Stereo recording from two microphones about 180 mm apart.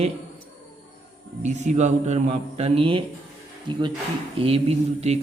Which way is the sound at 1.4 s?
40° right (ahead or behind).